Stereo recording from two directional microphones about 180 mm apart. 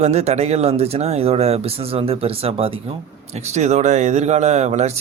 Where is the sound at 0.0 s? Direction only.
40° right (ahead or behind).